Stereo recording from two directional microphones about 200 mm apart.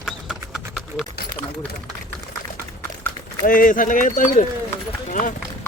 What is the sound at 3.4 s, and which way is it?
Speech, 45° left (ahead or behind).